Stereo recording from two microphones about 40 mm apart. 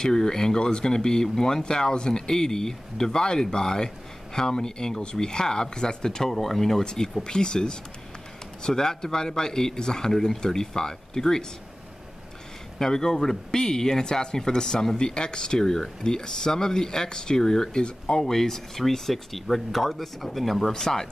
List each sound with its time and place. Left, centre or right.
0.0 s speech: centre
12.7 s speech: centre
20.7 s speech: centre